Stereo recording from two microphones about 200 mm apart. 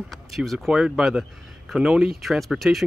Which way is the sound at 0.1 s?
Centre (ahead or behind).